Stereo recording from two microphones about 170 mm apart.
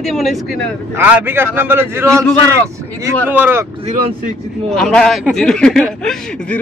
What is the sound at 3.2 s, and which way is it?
Speech, 10° right (ahead or behind).